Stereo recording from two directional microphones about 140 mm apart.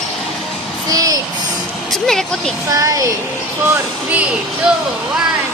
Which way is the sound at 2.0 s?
5° left (ahead or behind).